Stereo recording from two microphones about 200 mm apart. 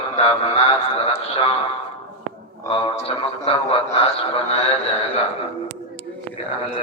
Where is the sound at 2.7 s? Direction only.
25° left (ahead or behind).